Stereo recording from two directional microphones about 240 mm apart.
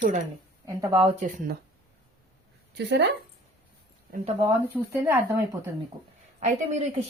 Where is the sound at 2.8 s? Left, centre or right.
Right.